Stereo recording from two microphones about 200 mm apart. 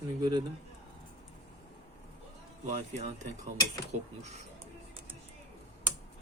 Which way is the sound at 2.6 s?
35° right (ahead or behind).